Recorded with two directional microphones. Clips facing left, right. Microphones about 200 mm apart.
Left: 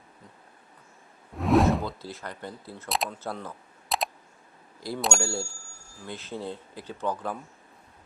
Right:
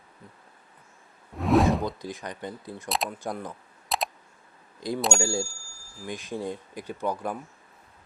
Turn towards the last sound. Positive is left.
turn(degrees=-10)  # may be behind; listen again after turning